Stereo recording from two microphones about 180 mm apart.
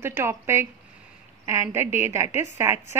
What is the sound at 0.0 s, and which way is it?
A woman's voice, 15° right (ahead or behind).